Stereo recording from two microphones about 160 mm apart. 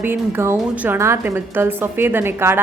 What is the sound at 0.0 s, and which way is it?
A woman's voice, 15° right (ahead or behind).